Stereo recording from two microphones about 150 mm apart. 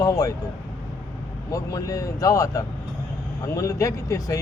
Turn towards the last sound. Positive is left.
turn(degrees=20)  # may be behind; listen again after turning